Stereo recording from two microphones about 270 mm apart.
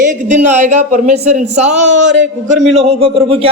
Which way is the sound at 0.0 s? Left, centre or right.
Right.